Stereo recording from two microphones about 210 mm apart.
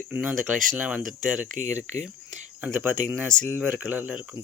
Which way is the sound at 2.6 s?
5° right (ahead or behind).